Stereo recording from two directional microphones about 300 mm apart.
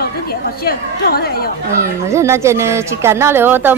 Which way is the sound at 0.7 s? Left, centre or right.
Left.